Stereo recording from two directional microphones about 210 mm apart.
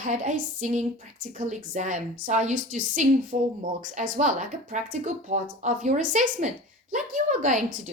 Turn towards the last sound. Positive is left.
turn(degrees=-35)  # may be behind; listen again after turning